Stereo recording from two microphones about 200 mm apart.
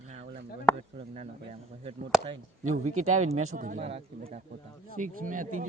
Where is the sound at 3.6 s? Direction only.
40° right (ahead or behind).